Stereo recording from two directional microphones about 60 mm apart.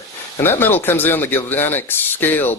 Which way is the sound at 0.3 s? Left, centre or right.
Left.